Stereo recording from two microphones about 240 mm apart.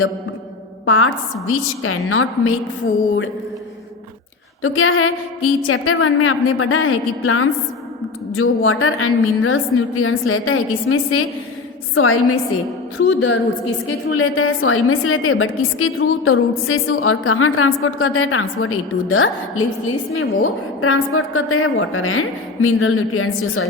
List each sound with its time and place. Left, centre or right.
0.9 s a woman's voice: left
4.6 s a woman's voice: left